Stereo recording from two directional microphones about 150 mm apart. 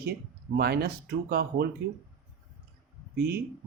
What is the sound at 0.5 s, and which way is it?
Speech, 90° right.